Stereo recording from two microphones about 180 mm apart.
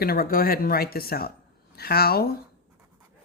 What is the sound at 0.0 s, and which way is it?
Speech, 55° left (ahead or behind).